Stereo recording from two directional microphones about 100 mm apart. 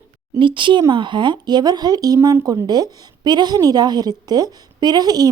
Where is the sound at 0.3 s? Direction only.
55° right (ahead or behind).